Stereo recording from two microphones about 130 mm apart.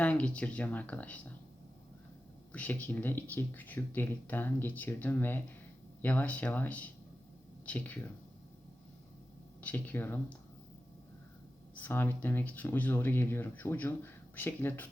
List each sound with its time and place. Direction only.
0.0 s speech: 10° left (ahead or behind)
2.5 s speech: 10° left (ahead or behind)
9.6 s speech: 10° left (ahead or behind)
11.8 s speech: 15° left (ahead or behind)